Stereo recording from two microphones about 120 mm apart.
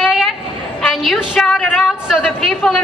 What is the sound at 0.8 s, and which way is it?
A woman's voice, centre (ahead or behind).